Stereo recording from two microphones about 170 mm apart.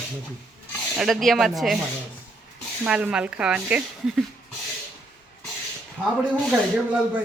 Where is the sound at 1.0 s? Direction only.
Centre (ahead or behind).